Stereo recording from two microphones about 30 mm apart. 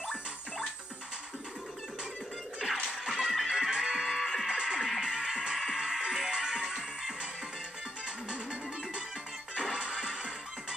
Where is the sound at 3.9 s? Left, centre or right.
Centre.